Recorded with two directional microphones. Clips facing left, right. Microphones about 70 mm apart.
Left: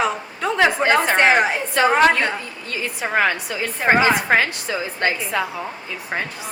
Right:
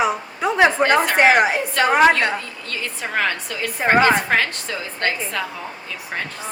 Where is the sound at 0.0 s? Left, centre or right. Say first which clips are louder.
Right 2 dB; centre.